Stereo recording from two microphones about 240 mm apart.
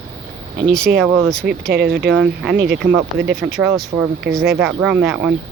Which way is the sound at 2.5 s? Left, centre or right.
Right.